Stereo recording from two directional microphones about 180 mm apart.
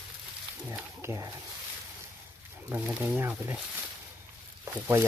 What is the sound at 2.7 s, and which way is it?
Speech, 10° right (ahead or behind).